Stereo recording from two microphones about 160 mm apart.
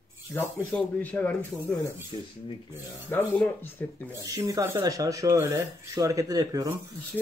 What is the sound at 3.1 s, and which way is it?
Speech, 10° left (ahead or behind).